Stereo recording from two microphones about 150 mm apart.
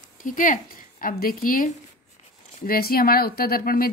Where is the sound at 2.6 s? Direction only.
80° left.